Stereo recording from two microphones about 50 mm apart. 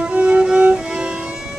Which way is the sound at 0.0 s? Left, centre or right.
Right.